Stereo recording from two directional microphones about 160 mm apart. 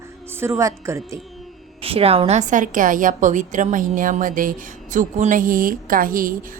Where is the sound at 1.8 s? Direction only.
35° right (ahead or behind).